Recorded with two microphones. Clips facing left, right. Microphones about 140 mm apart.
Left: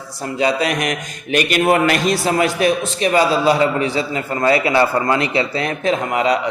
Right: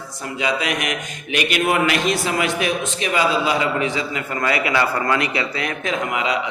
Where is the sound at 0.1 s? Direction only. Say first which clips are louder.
Left 5 dB; 35° left (ahead or behind).